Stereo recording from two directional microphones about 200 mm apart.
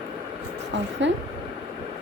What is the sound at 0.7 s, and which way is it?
Speech, 65° right (ahead or behind).